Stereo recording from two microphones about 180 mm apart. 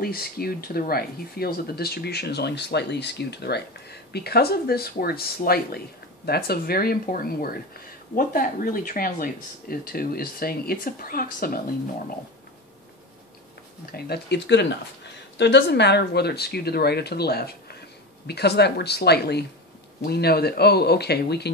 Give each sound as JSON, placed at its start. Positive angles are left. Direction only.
{"t": 0.0, "sound": "speech", "side_deg": 60}
{"t": 13.9, "sound": "speech", "side_deg": 65}